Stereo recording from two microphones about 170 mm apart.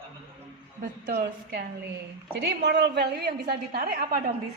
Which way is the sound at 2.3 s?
90° right.